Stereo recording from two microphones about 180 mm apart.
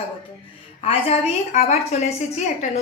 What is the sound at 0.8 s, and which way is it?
A woman's voice, 35° left (ahead or behind).